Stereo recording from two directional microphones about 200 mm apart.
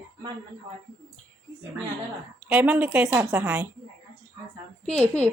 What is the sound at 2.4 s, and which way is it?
Speech, 10° right (ahead or behind).